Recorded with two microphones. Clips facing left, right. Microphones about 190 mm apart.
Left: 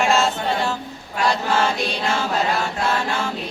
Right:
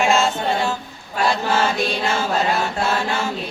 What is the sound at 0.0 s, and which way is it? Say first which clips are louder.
Choir: right 1 dB; centre (ahead or behind).